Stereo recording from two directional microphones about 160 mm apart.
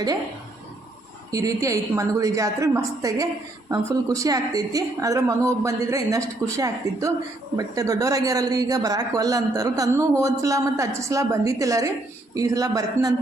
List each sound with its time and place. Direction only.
1.3 s speech: 20° right (ahead or behind)